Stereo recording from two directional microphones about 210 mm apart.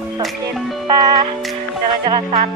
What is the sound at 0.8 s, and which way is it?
Music, 20° right (ahead or behind).